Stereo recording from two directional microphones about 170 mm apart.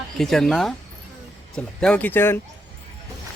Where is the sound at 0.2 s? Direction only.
Centre (ahead or behind).